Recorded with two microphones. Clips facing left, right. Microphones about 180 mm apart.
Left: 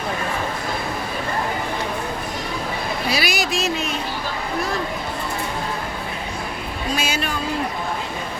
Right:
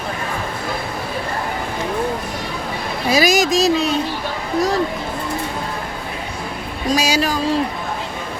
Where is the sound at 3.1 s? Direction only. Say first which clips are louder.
Right 9 dB; 45° right (ahead or behind).